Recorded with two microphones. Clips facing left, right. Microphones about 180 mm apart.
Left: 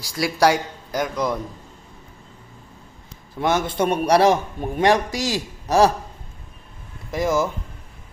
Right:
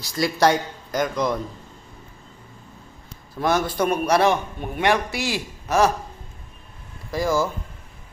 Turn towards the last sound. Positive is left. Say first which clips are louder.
# left 1 dB
turn(degrees=20)  # may be behind; listen again after turning